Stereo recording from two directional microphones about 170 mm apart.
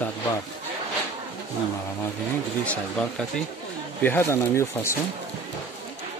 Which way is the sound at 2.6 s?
5° left (ahead or behind).